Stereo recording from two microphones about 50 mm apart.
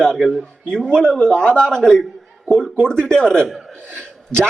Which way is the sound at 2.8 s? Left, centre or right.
Centre.